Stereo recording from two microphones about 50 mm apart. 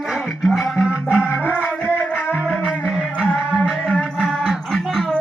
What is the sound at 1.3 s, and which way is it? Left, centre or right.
Music, left.